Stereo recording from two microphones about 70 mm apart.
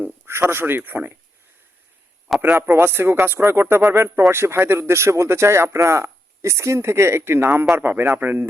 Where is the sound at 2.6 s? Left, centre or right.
Right.